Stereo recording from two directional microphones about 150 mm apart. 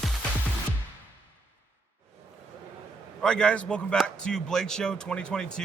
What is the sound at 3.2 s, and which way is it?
Speech, 5° left (ahead or behind).